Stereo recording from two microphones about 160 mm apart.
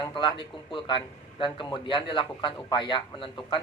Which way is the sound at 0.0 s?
30° left (ahead or behind).